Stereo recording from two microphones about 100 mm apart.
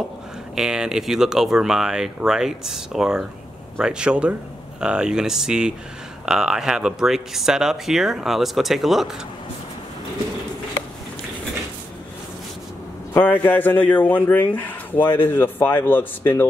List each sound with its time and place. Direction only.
0.6 s speech: 5° right (ahead or behind)
13.1 s a man's voice: 20° left (ahead or behind)